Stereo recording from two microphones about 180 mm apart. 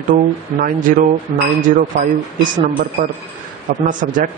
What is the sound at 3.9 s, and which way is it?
Speech, 45° right (ahead or behind).